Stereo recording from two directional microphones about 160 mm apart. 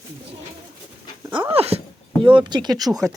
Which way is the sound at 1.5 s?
40° right (ahead or behind).